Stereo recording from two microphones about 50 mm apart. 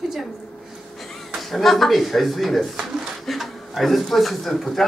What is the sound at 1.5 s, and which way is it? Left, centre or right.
Speech, centre.